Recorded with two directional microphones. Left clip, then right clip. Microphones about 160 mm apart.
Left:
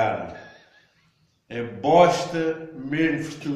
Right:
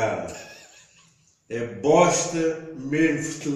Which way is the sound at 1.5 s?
20° left (ahead or behind).